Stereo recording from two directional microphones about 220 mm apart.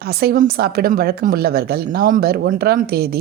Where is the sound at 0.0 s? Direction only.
45° right (ahead or behind).